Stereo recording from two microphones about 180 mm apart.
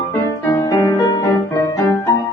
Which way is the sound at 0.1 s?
15° left (ahead or behind).